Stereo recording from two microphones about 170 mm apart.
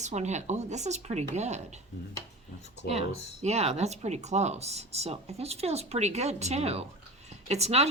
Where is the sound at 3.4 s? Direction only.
40° right (ahead or behind).